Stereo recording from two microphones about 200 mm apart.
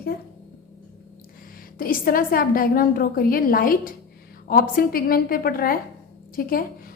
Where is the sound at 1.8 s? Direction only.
45° left (ahead or behind).